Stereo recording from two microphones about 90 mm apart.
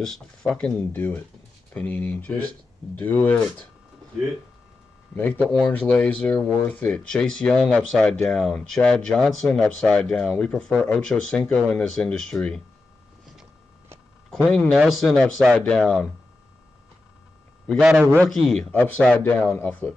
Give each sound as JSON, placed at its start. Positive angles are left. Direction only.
{"t": 0.0, "sound": "speech", "side_deg": 5}
{"t": 0.7, "sound": "speech", "side_deg": 20}
{"t": 5.1, "sound": "speech", "side_deg": 20}
{"t": 14.3, "sound": "speech", "side_deg": 5}
{"t": 15.5, "sound": "speech", "side_deg": 15}
{"t": 17.7, "sound": "a man's voice", "side_deg": -10}
{"t": 18.3, "sound": "speech", "side_deg": 5}
{"t": 18.7, "sound": "speech", "side_deg": 15}